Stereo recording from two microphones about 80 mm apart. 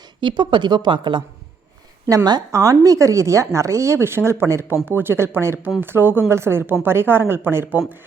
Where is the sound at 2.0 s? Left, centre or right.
Right.